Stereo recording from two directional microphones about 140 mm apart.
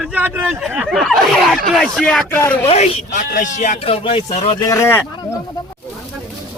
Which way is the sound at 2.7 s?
45° left (ahead or behind).